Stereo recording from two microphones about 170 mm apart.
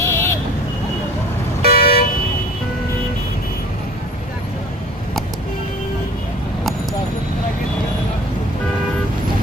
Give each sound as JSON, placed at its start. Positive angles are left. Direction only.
{"t": 0.0, "sound": "vehicle", "side_deg": 15}
{"t": 1.6, "sound": "vehicle", "side_deg": 65}